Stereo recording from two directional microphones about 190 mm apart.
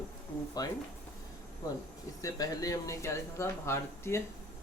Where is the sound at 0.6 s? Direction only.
20° left (ahead or behind).